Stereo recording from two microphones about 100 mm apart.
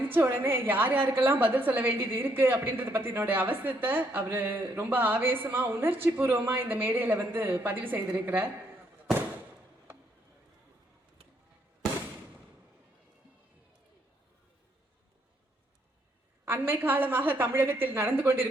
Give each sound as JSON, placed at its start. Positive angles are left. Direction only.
{"t": 0.1, "sound": "a woman's voice", "side_deg": -20}
{"t": 16.5, "sound": "a woman's voice", "side_deg": -20}